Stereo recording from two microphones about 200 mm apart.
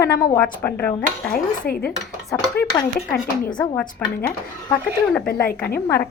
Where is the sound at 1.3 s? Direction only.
50° left (ahead or behind).